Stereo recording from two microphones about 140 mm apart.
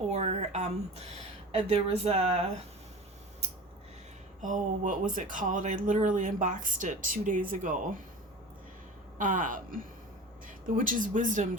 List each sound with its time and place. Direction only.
0.1 s a sound: 50° right (ahead or behind)
1.5 s speech: 45° right (ahead or behind)
4.4 s speech: 65° right (ahead or behind)
9.1 s speech: 70° right (ahead or behind)